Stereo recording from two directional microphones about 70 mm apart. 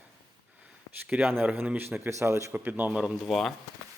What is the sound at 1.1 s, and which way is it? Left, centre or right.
Speech, right.